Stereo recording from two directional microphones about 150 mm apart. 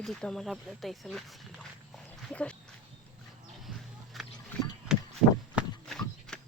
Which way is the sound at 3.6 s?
Centre (ahead or behind).